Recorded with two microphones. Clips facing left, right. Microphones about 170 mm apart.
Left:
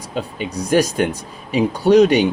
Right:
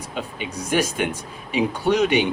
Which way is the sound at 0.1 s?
35° left (ahead or behind).